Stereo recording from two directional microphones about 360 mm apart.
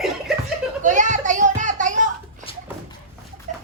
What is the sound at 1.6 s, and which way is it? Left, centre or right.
Music, right.